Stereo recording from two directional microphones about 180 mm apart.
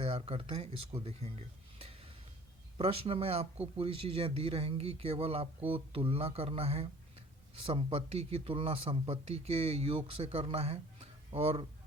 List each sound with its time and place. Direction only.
0.0 s speech: 30° right (ahead or behind)
2.7 s speech: 30° right (ahead or behind)